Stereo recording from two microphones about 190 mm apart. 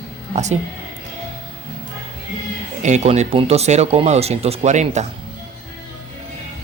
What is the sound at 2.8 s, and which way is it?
Speech, 35° right (ahead or behind).